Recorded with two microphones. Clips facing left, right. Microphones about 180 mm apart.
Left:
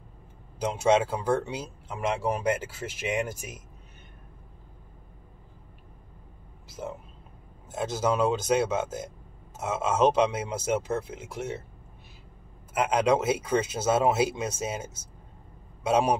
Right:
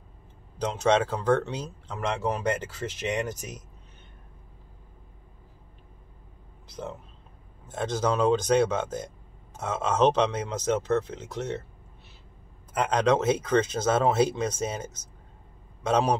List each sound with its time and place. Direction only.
0.6 s speech: 10° left (ahead or behind)
6.7 s a sound: 5° left (ahead or behind)
7.6 s speech: 5° left (ahead or behind)
12.7 s speech: 10° left (ahead or behind)